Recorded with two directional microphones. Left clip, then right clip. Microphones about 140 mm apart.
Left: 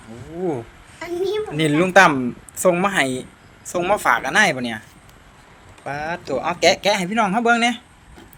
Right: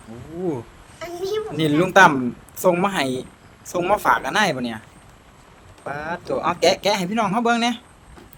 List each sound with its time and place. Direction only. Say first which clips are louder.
0.1 s a man's voice: left 2 dB; 5° right (ahead or behind)
5.8 s a man's voice: left 2 dB; 10° right (ahead or behind)